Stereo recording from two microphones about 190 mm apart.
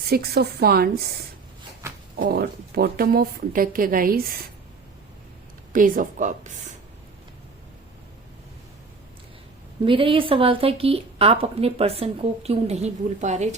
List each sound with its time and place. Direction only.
0.1 s a woman's voice: 55° right (ahead or behind)
2.1 s a woman's voice: 55° right (ahead or behind)
5.7 s a woman's voice: 45° right (ahead or behind)
9.8 s a woman's voice: 25° right (ahead or behind)